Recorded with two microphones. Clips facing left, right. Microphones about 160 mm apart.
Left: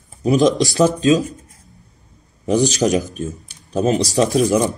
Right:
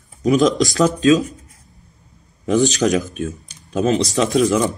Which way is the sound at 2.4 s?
40° left (ahead or behind).